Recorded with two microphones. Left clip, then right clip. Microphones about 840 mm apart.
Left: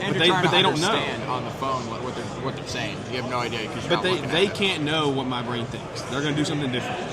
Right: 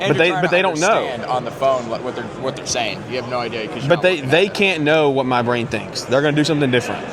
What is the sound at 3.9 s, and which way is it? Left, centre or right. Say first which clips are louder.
Speech: right 9 dB; right.